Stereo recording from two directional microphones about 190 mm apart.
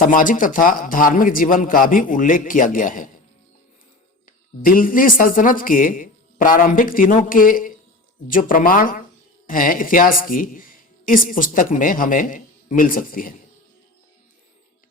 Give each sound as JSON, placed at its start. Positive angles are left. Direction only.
{"t": 0.0, "sound": "a woman's voice", "side_deg": 45}
{"t": 4.6, "sound": "a woman's voice", "side_deg": 50}